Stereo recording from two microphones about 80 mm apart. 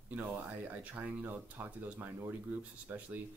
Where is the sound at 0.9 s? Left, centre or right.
Right.